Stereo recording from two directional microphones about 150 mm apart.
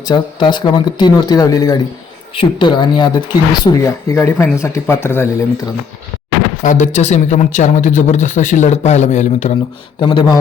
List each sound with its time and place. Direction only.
0.1 s speech: 30° left (ahead or behind)
2.3 s speech: 35° left (ahead or behind); by 5.3 s 15° left (ahead or behind)
6.6 s speech: 55° left (ahead or behind)
10.0 s speech: 30° left (ahead or behind)